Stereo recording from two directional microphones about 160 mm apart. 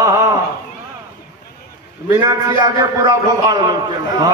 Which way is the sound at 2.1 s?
25° right (ahead or behind).